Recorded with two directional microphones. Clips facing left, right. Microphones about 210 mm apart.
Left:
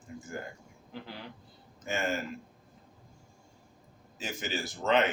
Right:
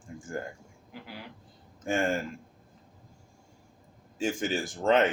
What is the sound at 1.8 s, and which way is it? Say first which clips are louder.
Speech: right 5 dB; 50° right (ahead or behind).